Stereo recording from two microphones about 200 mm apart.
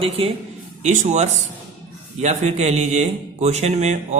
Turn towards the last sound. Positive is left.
turn(degrees=-35)  # may be behind; listen again after turning